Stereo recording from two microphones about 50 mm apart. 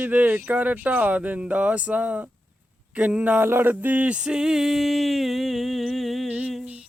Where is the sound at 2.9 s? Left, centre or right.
Right.